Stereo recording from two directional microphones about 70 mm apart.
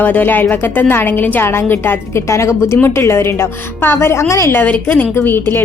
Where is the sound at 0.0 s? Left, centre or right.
Left.